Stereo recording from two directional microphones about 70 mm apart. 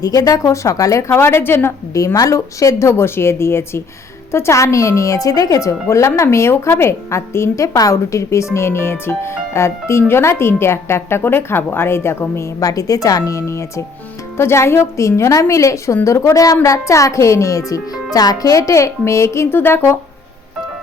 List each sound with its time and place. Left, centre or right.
0.0 s speech: left
1.1 s speech: left
2.1 s speech: left
12.5 s speech: left